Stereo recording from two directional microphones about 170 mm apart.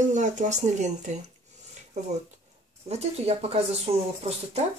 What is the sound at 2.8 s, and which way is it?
Speech, 40° right (ahead or behind).